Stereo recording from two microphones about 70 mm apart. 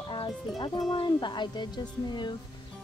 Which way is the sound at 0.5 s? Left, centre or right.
Left.